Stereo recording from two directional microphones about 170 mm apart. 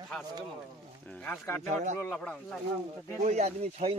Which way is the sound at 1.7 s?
45° right (ahead or behind).